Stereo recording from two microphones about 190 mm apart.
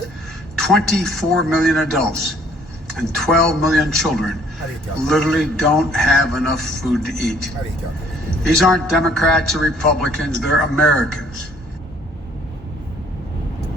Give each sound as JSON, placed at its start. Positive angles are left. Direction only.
{"t": 0.6, "sound": "a man's voice", "side_deg": 0}